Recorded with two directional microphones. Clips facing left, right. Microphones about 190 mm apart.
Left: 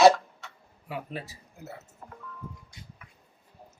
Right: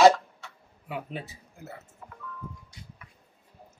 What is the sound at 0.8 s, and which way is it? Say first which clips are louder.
Speech: right 1 dB; centre (ahead or behind).